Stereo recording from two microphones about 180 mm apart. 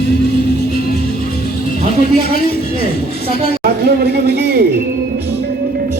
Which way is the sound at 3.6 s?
60° right (ahead or behind).